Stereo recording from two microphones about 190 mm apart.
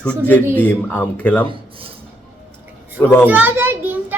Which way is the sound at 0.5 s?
10° left (ahead or behind).